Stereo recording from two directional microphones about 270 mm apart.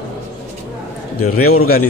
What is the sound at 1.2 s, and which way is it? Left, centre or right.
Speech, left.